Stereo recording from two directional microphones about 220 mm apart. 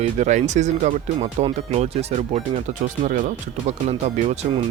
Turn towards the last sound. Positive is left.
turn(degrees=-30)  # may be behind; listen again after turning